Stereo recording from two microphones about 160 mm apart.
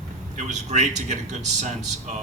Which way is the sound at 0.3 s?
50° right (ahead or behind).